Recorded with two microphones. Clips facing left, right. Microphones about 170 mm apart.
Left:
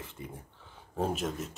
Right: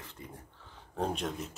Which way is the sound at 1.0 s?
5° left (ahead or behind).